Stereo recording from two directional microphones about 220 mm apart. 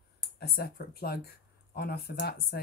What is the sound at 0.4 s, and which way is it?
Speech, 45° left (ahead or behind).